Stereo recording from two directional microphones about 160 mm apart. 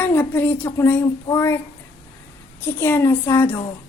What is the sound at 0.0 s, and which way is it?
Child singing, 10° left (ahead or behind).